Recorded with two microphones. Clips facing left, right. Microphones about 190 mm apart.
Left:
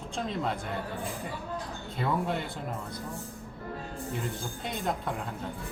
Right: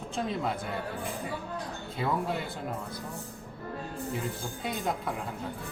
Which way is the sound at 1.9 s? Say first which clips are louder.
Left 1 dB; 5° right (ahead or behind).